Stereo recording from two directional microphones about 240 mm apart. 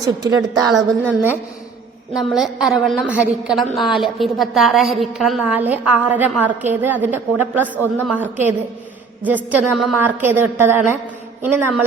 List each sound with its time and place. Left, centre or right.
0.0 s a woman's voice: centre
0.7 s a woman's voice: centre